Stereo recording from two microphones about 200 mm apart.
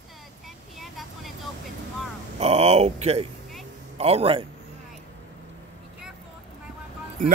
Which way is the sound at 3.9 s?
30° right (ahead or behind).